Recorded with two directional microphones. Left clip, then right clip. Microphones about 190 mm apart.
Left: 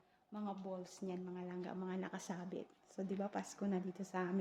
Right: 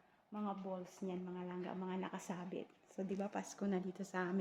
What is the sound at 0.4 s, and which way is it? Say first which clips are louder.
Speech: right 1 dB; 10° right (ahead or behind).